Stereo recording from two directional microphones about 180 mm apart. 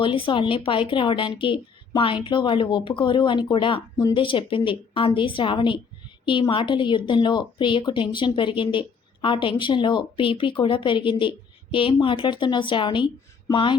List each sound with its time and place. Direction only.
0.0 s a woman's voice: 30° left (ahead or behind)